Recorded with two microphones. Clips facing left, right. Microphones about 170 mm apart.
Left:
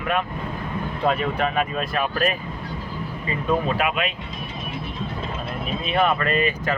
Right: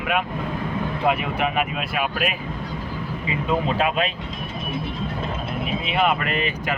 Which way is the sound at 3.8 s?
35° right (ahead or behind).